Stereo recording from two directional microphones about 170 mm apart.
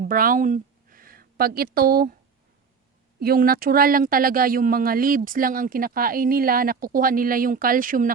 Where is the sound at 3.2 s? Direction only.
60° right (ahead or behind).